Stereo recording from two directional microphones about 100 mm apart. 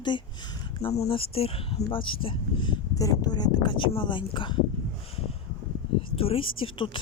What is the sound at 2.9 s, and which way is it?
Speech, 40° left (ahead or behind).